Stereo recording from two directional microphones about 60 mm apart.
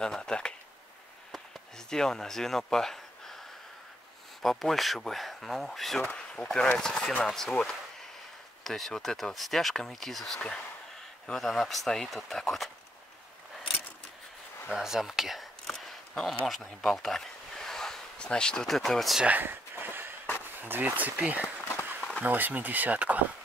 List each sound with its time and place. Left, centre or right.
0.0 s speech: centre
1.9 s speech: centre
6.1 s speech: centre
14.7 s a sound: centre
16.4 s speech: centre
19.2 s a sound: right
20.5 s speech: right